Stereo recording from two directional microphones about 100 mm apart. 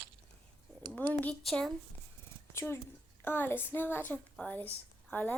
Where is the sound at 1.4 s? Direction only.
5° left (ahead or behind).